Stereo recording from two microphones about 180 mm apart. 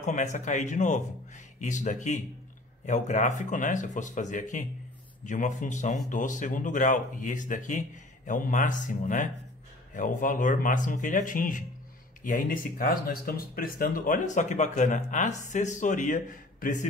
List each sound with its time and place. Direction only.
0.0 s speech: 40° left (ahead or behind)